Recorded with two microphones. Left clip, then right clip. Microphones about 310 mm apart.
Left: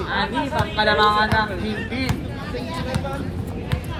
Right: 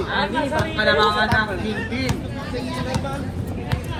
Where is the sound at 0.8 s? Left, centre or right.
Left.